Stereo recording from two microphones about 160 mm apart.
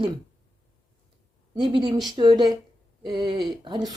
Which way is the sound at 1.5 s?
30° right (ahead or behind).